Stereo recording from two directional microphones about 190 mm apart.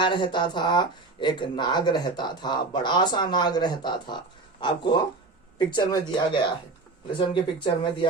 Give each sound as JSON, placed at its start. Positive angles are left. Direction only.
{"t": 0.0, "sound": "speech", "side_deg": 25}
{"t": 7.2, "sound": "speech", "side_deg": 25}